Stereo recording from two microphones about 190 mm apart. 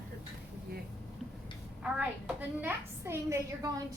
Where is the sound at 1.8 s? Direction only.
5° right (ahead or behind).